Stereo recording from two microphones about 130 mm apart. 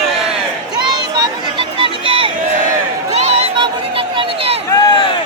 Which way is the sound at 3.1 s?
55° right (ahead or behind).